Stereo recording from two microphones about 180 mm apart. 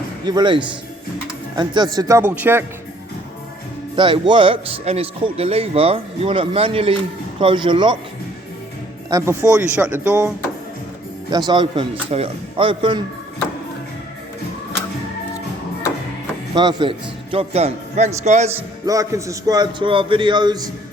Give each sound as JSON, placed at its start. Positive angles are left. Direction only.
{"t": 0.3, "sound": "speech", "side_deg": -25}
{"t": 3.9, "sound": "speech", "side_deg": -25}
{"t": 9.0, "sound": "speech", "side_deg": -20}
{"t": 9.5, "sound": "speech", "side_deg": -5}
{"t": 11.3, "sound": "speech", "side_deg": -25}
{"t": 16.6, "sound": "speech", "side_deg": -25}
{"t": 18.5, "sound": "speech", "side_deg": -20}